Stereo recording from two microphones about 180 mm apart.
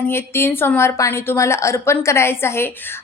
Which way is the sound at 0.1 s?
10° left (ahead or behind).